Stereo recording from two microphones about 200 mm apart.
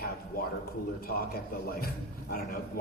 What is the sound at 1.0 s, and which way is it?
Speech, 50° left (ahead or behind).